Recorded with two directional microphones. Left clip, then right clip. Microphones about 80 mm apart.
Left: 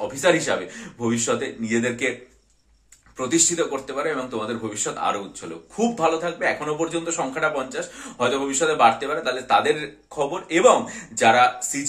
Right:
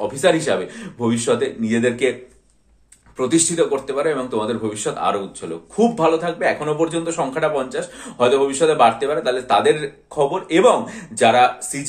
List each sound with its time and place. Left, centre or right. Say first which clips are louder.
0.1 s speech: right 2 dB; right
3.2 s a man's voice: right 4 dB; right